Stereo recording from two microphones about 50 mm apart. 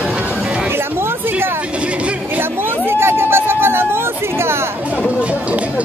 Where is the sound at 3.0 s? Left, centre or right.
Right.